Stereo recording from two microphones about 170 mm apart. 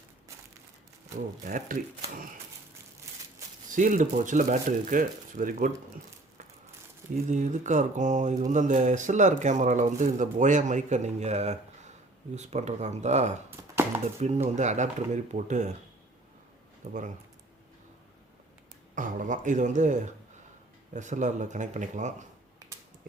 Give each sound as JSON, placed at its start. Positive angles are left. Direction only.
{"t": 1.5, "sound": "speech", "side_deg": -50}
{"t": 3.7, "sound": "speech", "side_deg": -50}
{"t": 7.3, "sound": "speech", "side_deg": -45}
{"t": 13.5, "sound": "chopping", "side_deg": -15}
{"t": 14.2, "sound": "speech", "side_deg": -40}
{"t": 16.8, "sound": "speech", "side_deg": -45}
{"t": 18.9, "sound": "speech", "side_deg": -50}